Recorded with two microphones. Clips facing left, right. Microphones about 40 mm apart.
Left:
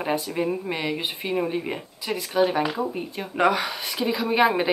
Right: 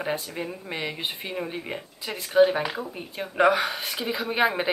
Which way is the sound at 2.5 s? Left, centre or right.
Centre.